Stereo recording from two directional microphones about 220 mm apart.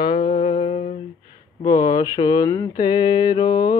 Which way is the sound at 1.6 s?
15° left (ahead or behind).